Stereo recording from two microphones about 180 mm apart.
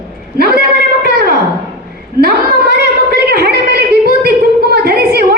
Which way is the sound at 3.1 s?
60° right (ahead or behind).